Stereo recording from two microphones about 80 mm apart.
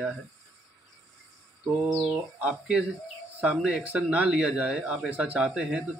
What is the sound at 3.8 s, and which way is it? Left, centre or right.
Speech, centre.